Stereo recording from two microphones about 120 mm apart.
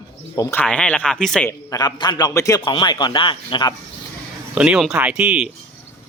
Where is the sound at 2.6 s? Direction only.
40° left (ahead or behind).